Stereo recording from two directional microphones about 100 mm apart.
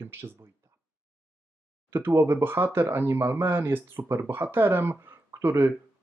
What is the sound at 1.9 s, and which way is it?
Speech, 25° right (ahead or behind).